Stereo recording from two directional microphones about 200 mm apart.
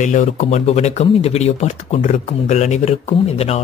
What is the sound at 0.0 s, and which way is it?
Speech, 35° left (ahead or behind).